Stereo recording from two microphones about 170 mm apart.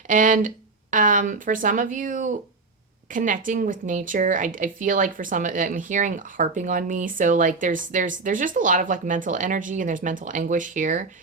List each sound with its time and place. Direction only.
0.1 s speech: 50° right (ahead or behind)